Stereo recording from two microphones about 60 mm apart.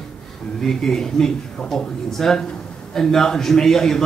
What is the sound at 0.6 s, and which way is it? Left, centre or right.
Speech, centre.